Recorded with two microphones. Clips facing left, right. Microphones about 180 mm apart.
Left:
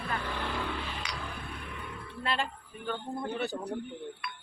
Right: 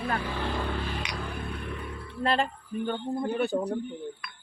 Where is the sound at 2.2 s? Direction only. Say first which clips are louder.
Right 7 dB; 40° right (ahead or behind).